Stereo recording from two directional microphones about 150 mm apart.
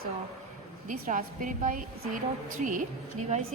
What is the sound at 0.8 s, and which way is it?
A woman's voice, 65° right (ahead or behind).